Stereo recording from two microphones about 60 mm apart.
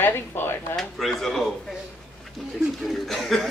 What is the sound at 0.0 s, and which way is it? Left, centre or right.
Speech, left.